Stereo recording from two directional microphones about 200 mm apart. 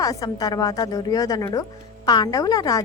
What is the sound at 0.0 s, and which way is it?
A woman's voice, 20° left (ahead or behind).